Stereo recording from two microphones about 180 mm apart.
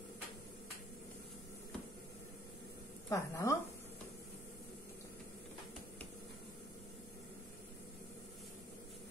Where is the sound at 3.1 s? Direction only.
20° left (ahead or behind).